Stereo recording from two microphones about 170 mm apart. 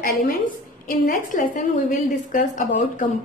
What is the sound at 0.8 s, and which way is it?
A woman's voice, 50° left (ahead or behind).